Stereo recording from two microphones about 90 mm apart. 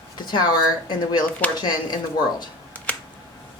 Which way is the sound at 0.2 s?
50° left (ahead or behind).